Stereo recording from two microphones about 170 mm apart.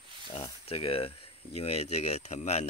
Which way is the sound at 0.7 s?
35° left (ahead or behind).